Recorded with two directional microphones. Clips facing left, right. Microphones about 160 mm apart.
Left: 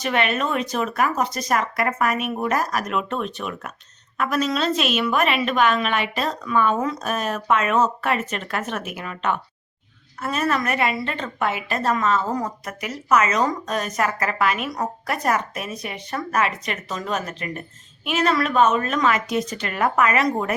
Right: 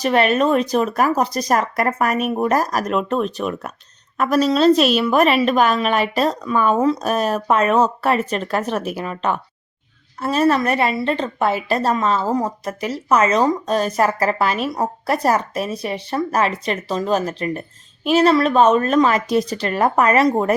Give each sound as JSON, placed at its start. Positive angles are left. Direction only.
{"t": 0.0, "sound": "a woman's voice", "side_deg": -35}